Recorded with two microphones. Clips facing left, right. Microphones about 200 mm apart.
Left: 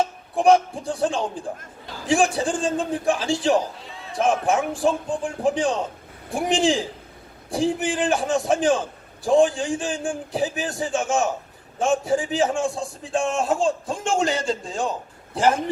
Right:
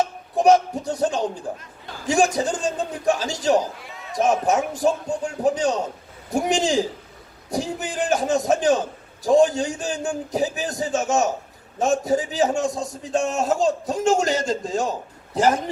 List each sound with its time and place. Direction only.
0.3 s a man's voice: 40° right (ahead or behind)